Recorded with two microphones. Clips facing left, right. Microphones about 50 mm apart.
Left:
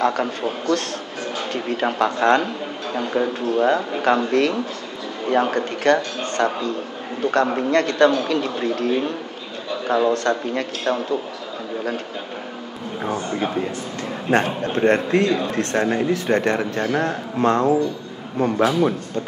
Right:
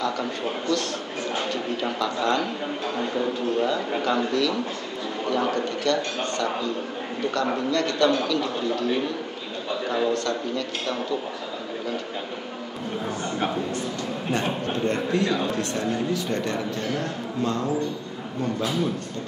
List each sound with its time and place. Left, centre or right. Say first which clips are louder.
0.0 s a man's voice: left 6 dB; left
10.1 s a man's voice: left 5 dB; left
13.0 s a man's voice: left 5 dB; left